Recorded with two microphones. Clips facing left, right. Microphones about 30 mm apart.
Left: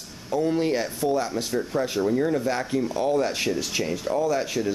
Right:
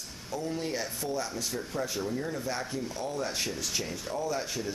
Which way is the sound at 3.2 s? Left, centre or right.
Left.